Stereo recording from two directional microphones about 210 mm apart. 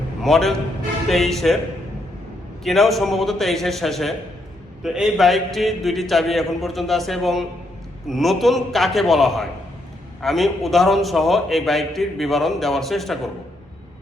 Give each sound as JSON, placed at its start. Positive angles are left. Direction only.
{"t": 0.2, "sound": "a man's voice", "side_deg": 0}
{"t": 2.6, "sound": "a man's voice", "side_deg": 0}